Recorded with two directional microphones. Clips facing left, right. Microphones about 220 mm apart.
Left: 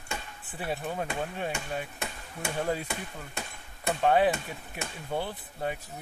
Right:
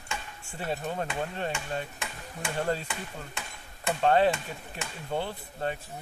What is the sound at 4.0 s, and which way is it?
Speech, 10° left (ahead or behind).